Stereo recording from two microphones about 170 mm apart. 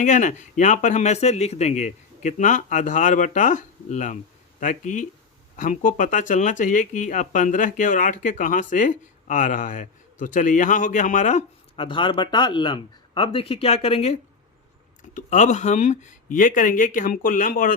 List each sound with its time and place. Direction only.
0.0 s speech: 50° left (ahead or behind)
11.8 s speech: 30° left (ahead or behind); by 17.7 s 55° left (ahead or behind)